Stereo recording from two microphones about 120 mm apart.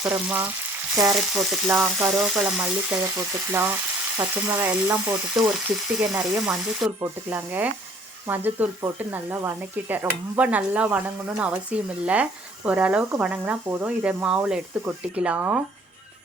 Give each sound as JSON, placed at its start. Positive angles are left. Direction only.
{"t": 0.0, "sound": "speech", "side_deg": -15}
{"t": 1.1, "sound": "frying", "side_deg": -5}
{"t": 2.0, "sound": "speech", "side_deg": -25}
{"t": 2.3, "sound": "speech", "side_deg": -5}
{"t": 3.2, "sound": "speech", "side_deg": -20}